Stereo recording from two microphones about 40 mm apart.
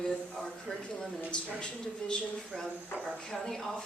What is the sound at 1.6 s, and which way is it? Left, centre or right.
Speech, left.